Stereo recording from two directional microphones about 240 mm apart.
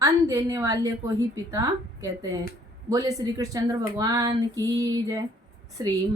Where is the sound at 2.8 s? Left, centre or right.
Centre.